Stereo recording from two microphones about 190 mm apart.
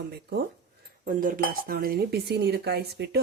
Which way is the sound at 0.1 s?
60° right (ahead or behind).